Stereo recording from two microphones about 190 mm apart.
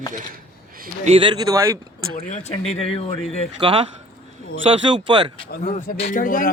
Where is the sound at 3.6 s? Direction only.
25° right (ahead or behind).